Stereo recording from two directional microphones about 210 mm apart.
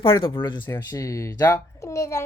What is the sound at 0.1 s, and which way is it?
Speech, 20° left (ahead or behind).